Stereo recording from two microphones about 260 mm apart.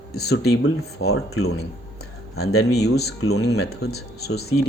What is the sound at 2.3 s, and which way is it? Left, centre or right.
Speech, left.